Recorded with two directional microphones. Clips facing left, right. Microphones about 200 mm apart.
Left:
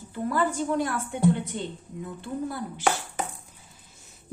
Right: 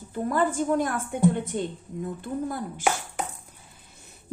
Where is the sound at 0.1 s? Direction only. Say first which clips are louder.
Right 2 dB; 45° right (ahead or behind).